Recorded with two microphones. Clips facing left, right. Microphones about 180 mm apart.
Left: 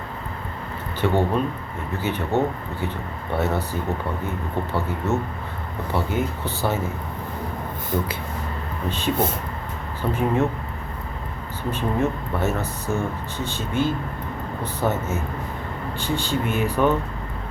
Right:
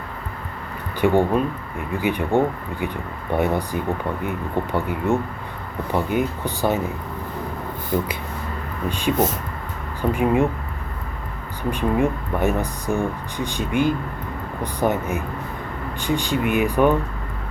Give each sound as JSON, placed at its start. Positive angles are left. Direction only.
{"t": 1.0, "sound": "speech", "side_deg": -10}
{"t": 8.9, "sound": "speech", "side_deg": -15}
{"t": 11.7, "sound": "speech", "side_deg": -15}